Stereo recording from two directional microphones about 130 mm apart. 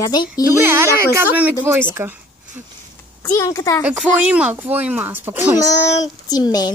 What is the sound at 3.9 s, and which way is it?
Speech, 10° right (ahead or behind).